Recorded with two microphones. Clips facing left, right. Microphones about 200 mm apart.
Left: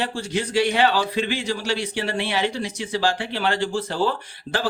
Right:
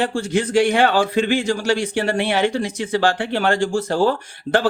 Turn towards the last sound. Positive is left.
turn(degrees=-45)  # may be behind; listen again after turning